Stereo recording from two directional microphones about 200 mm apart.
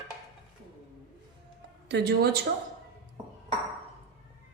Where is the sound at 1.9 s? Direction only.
55° right (ahead or behind).